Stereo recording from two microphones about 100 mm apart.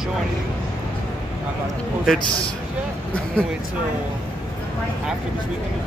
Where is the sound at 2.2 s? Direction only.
60° left (ahead or behind).